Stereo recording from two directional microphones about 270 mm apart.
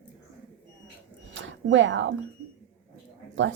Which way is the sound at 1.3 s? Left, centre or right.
Right.